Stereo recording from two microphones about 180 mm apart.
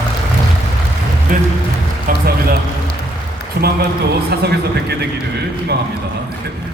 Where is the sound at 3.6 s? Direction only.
70° right (ahead or behind).